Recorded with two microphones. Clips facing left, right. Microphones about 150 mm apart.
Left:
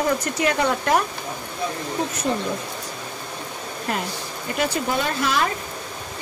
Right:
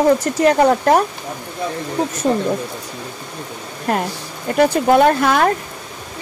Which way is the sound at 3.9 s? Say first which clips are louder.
Right 8 dB; 50° right (ahead or behind).